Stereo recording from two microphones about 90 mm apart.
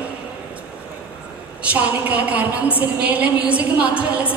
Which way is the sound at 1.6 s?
15° right (ahead or behind).